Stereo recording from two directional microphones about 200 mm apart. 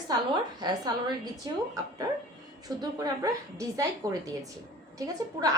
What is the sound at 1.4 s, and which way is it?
Speech, 20° right (ahead or behind).